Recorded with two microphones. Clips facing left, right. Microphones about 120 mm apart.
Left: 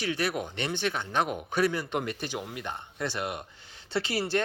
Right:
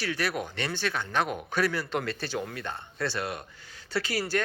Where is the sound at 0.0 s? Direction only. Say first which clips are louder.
Left 1 dB; 20° left (ahead or behind).